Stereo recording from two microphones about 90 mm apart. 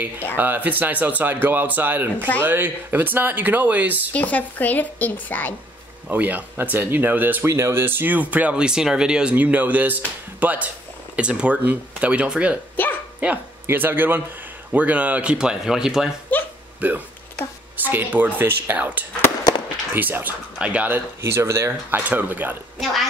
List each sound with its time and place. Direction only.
0.4 s speech: 20° right (ahead or behind)
4.1 s a woman's voice: 15° left (ahead or behind)
6.0 s speech: 20° right (ahead or behind)
7.4 s speech: 35° right (ahead or behind); by 16.1 s 5° right (ahead or behind)
16.3 s a sound: 20° left (ahead or behind)
16.8 s speech: 15° right (ahead or behind)
21.2 s speech: 30° right (ahead or behind)